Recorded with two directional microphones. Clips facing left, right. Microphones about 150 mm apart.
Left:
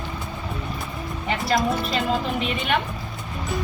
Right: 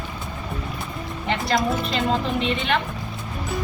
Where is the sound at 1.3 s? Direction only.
Centre (ahead or behind).